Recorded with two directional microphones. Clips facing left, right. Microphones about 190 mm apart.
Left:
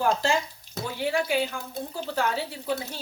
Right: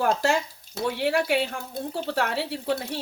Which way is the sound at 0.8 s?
65° right (ahead or behind).